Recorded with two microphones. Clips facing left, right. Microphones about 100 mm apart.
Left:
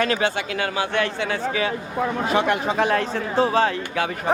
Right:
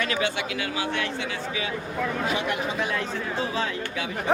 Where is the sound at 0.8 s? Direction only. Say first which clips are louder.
Left 6 dB; 60° left (ahead or behind).